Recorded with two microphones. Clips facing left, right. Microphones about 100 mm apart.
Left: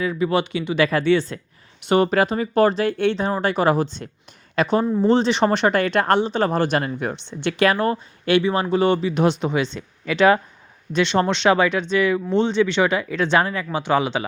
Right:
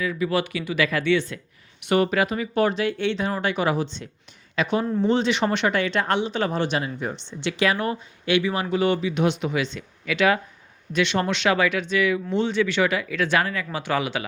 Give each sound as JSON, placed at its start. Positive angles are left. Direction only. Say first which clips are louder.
{"t": 0.0, "sound": "speech", "louder": "left 3 dB", "side_deg": 30}